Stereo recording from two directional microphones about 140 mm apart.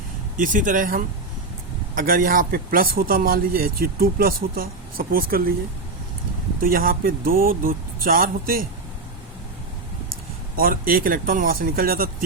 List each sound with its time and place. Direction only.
0.3 s speech: 70° right (ahead or behind)
2.0 s a man's voice: 90° right
6.6 s a man's voice: 90° right
10.6 s a man's voice: 90° right